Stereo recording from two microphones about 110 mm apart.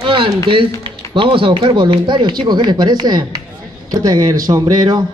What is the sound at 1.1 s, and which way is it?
Speech, 50° right (ahead or behind).